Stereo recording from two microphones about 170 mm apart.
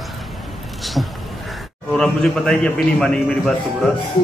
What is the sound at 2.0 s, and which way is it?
A man's voice, 5° left (ahead or behind).